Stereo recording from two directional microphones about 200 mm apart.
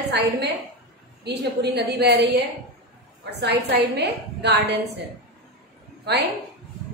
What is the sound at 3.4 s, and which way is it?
A woman's voice, 55° right (ahead or behind).